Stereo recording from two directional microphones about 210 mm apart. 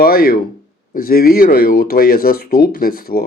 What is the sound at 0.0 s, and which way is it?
Speech, 45° left (ahead or behind).